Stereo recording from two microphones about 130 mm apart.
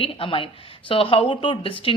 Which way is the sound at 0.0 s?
45° left (ahead or behind).